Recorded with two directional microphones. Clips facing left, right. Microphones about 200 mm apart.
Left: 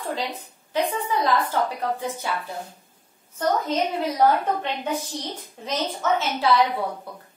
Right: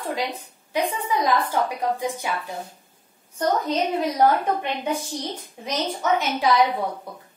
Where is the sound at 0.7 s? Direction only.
15° right (ahead or behind).